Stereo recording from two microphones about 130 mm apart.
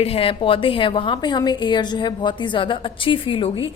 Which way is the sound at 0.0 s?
50° left (ahead or behind).